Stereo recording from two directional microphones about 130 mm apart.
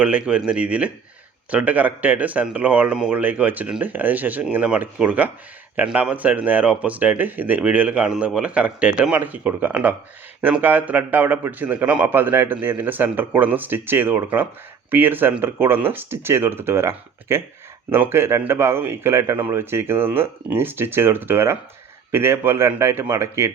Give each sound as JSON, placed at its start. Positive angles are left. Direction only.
{"t": 0.0, "sound": "speech", "side_deg": -10}